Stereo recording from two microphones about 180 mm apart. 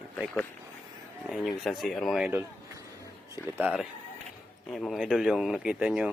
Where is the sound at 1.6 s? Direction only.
Centre (ahead or behind).